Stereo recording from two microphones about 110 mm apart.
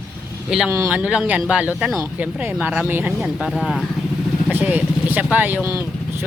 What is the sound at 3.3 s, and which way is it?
Speech, 5° left (ahead or behind).